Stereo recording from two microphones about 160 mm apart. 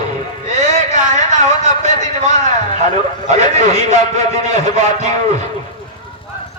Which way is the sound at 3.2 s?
50° right (ahead or behind).